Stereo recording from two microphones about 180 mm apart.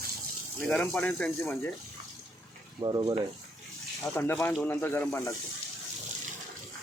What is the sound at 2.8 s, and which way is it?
Speech, 25° right (ahead or behind).